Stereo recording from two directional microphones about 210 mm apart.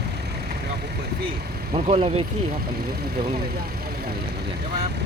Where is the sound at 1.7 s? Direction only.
25° right (ahead or behind).